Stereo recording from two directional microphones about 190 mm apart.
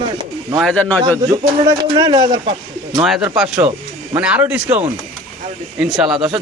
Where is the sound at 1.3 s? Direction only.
20° right (ahead or behind).